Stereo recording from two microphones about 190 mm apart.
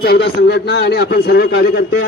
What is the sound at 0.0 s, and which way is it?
A man's voice, 60° left (ahead or behind).